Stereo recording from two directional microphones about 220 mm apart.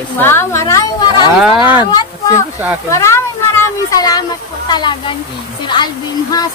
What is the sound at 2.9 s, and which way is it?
Speech, 15° left (ahead or behind).